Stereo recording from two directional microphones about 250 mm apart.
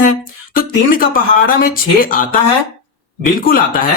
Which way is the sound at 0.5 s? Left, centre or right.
Left.